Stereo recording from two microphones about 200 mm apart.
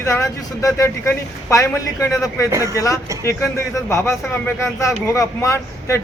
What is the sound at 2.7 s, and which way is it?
Speech, 15° left (ahead or behind).